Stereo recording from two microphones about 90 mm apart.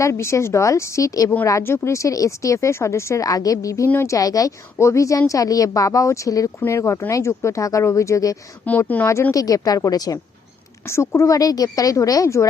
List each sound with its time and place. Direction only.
0.0 s speech: 30° left (ahead or behind)
1.6 s speech: 30° left (ahead or behind)
8.7 s speech: 15° left (ahead or behind)
9.3 s a woman's voice: 40° left (ahead or behind)
10.8 s speech: 30° left (ahead or behind)